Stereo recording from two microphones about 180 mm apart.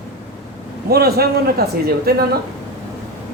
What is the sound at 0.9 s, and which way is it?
Speech, 60° right (ahead or behind).